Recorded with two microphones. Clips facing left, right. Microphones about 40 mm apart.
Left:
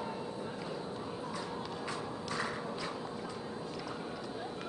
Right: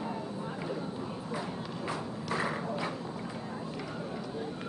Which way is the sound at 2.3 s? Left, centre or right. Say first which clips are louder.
Right 6 dB; centre.